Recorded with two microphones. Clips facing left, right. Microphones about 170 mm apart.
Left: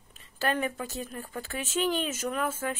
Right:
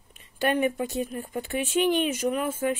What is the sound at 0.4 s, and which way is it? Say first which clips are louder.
A woman's voice: right 5 dB; 15° right (ahead or behind).